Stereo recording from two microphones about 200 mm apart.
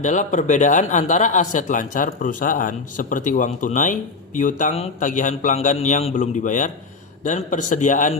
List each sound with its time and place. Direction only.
0.0 s speech: 40° left (ahead or behind)